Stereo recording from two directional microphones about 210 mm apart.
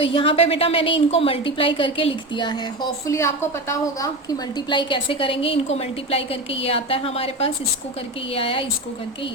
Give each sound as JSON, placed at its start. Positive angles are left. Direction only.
{"t": 0.0, "sound": "a woman's voice", "side_deg": 25}